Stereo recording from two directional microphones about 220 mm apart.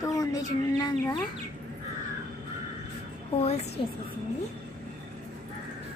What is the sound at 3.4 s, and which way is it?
Speech, 30° left (ahead or behind).